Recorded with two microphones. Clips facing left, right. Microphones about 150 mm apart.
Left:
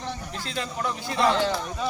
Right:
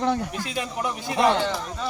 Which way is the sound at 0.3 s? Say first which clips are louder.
Right 2 dB; 15° right (ahead or behind).